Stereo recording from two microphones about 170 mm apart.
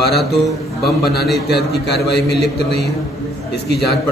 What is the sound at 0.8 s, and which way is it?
A man's voice, 70° left (ahead or behind).